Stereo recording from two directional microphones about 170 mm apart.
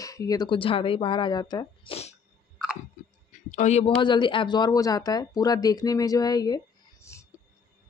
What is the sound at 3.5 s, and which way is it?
Speech, 45° left (ahead or behind).